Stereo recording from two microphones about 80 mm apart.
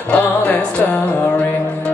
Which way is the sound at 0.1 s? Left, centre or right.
Centre.